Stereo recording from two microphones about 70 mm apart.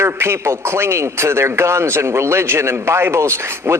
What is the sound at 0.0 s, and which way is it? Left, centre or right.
A man's voice, right.